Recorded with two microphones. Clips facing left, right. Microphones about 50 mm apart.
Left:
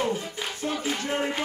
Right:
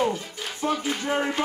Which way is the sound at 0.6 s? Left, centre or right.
Centre.